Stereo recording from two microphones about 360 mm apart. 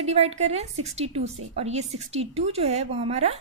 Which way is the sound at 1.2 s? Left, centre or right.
Right.